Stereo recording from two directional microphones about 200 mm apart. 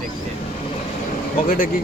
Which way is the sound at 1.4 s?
45° left (ahead or behind).